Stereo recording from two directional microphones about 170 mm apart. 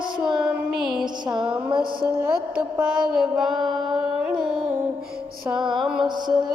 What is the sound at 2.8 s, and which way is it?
Carnatic music, 5° right (ahead or behind).